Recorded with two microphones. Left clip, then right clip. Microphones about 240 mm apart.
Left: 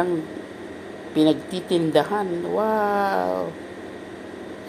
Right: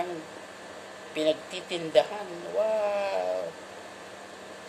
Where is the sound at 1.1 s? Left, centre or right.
Left.